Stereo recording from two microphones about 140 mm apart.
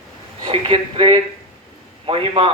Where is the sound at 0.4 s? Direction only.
35° right (ahead or behind).